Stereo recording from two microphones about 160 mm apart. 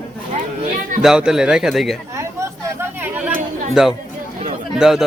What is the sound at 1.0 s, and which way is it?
Speech, 5° right (ahead or behind).